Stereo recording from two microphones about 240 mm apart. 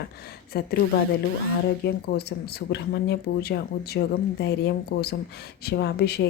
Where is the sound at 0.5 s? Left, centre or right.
Left.